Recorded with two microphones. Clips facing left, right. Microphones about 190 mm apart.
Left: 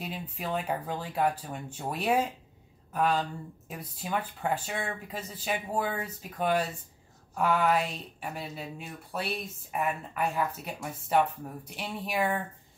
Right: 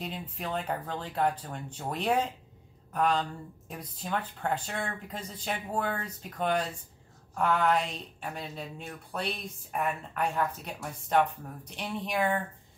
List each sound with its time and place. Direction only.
0.0 s speech: 5° left (ahead or behind)